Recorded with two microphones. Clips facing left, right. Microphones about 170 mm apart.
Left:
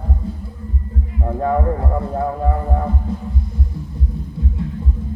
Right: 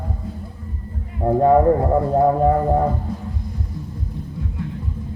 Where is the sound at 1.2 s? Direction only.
30° right (ahead or behind).